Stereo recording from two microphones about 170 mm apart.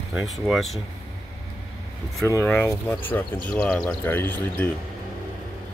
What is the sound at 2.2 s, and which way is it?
Speech, 15° left (ahead or behind).